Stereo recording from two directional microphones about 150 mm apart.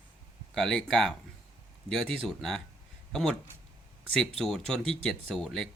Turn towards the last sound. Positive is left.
turn(degrees=5)  # may be behind; listen again after turning